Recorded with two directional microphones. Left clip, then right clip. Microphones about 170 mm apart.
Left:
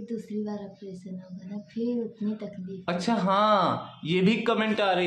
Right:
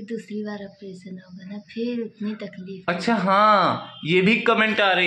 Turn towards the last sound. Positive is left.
turn(degrees=0)  # may be behind; listen again after turning